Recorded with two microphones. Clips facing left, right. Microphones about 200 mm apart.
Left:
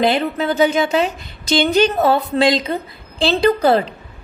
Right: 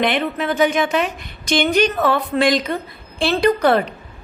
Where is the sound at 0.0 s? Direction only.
30° left (ahead or behind).